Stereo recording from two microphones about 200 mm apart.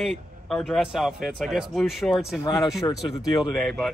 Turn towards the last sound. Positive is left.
turn(degrees=0)  # may be behind; listen again after turning